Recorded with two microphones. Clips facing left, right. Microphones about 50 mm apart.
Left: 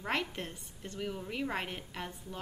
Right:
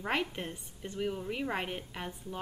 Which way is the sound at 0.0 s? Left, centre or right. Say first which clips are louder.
Right 2 dB; centre.